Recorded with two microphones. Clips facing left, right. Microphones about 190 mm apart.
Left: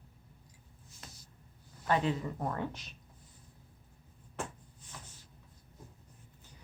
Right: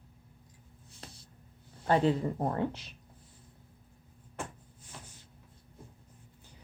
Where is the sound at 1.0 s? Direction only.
35° right (ahead or behind).